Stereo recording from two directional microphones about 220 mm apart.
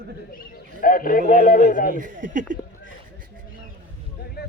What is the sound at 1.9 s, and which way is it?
Speech, 35° right (ahead or behind).